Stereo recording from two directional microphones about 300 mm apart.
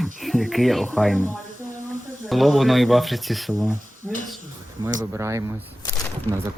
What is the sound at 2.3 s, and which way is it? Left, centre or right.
Speech, centre.